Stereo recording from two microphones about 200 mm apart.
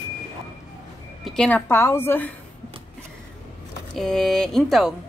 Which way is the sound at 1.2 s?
5° left (ahead or behind).